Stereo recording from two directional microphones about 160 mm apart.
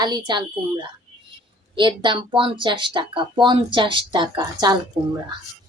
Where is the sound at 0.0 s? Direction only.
25° right (ahead or behind).